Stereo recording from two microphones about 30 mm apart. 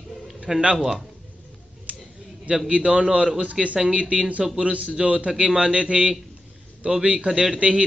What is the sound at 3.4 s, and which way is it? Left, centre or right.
A man's voice, right.